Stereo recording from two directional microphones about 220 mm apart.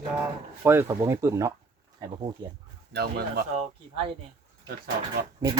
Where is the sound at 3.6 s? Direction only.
25° right (ahead or behind).